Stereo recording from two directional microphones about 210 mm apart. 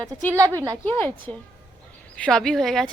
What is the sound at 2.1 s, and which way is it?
Speech, 5° left (ahead or behind).